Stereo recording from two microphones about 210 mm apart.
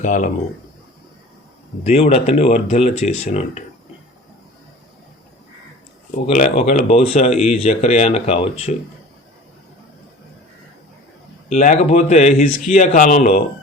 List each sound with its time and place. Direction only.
0.0 s speech: 35° left (ahead or behind)
1.8 s speech: 30° left (ahead or behind)
6.2 s speech: 35° left (ahead or behind)
11.4 s speech: 35° left (ahead or behind)